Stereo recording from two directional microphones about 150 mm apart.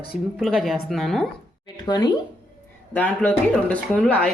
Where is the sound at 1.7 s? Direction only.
25° left (ahead or behind).